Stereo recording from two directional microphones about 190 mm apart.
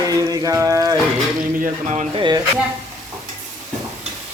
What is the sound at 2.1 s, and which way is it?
Speech, 25° right (ahead or behind).